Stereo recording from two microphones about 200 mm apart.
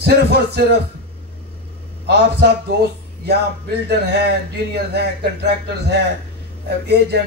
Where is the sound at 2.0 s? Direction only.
55° right (ahead or behind).